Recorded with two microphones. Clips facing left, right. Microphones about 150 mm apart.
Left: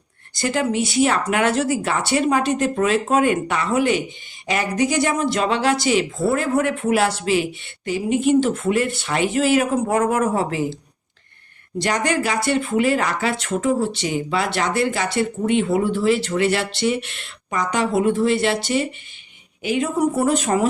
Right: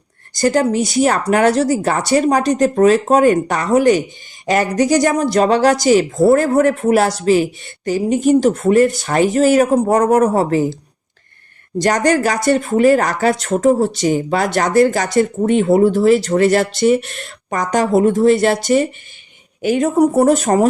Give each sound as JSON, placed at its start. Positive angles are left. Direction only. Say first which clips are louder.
{"t": 0.3, "sound": "speech", "louder": "right 6 dB", "side_deg": -40}
{"t": 11.8, "sound": "speech", "louder": "right 7 dB", "side_deg": -40}